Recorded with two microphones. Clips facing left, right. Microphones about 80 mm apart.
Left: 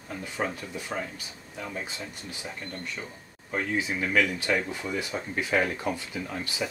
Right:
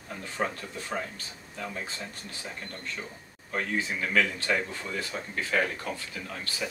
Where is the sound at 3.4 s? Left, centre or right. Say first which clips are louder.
Left 2 dB; centre.